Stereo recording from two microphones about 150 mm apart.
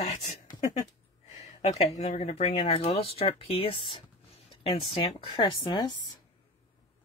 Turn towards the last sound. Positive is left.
turn(degrees=25)  # may be behind; listen again after turning